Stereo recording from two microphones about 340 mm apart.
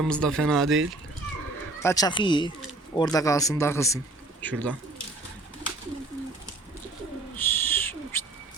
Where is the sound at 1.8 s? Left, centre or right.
Centre.